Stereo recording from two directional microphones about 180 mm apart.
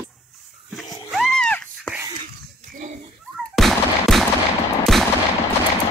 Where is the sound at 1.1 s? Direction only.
Centre (ahead or behind).